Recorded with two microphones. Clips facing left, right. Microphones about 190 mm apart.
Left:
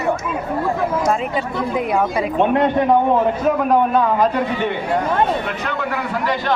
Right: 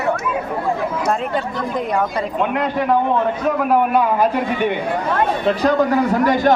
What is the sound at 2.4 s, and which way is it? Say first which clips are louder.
Speech: left 5 dB; 25° left (ahead or behind).